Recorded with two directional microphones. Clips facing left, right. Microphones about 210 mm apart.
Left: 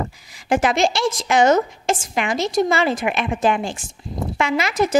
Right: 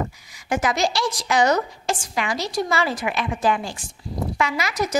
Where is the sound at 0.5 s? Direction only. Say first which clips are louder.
Left 4 dB; 30° left (ahead or behind).